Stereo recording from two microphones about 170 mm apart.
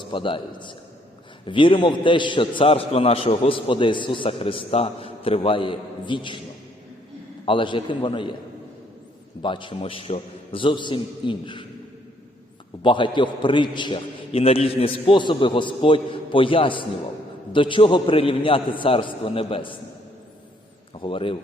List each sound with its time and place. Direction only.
0.0 s a man's voice: 30° left (ahead or behind)
7.4 s a man's voice: 30° left (ahead or behind)
9.4 s a man's voice: 30° left (ahead or behind)
12.8 s a man's voice: 30° left (ahead or behind)
20.9 s a man's voice: 30° left (ahead or behind)